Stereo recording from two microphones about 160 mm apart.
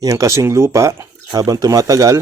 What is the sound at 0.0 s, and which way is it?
Speech, 20° right (ahead or behind).